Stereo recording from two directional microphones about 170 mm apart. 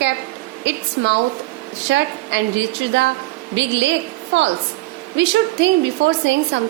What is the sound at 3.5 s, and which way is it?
Speech, 90° right.